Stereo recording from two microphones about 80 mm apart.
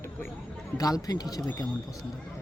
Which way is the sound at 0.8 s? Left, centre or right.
Left.